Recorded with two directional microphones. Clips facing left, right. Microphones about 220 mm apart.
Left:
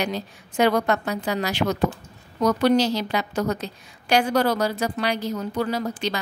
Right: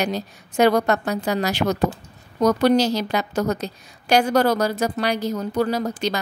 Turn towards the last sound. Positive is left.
turn(degrees=-40)  # may be behind; listen again after turning